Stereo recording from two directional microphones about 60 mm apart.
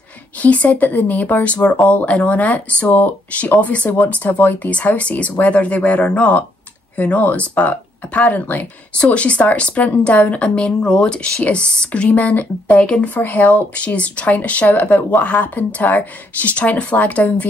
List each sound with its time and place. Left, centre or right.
0.4 s speech: left